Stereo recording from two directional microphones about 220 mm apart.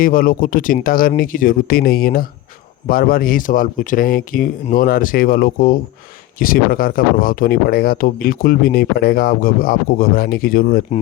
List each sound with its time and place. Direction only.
0.0 s speech: 40° left (ahead or behind)